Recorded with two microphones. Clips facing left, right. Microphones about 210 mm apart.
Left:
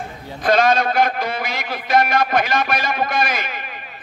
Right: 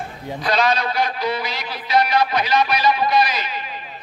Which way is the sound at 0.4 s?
50° left (ahead or behind).